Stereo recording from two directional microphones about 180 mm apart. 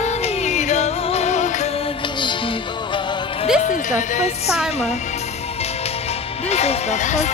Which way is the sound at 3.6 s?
45° left (ahead or behind).